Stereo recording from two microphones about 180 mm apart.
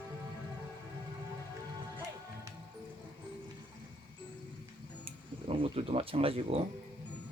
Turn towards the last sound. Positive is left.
turn(degrees=-35)  # may be behind; listen again after turning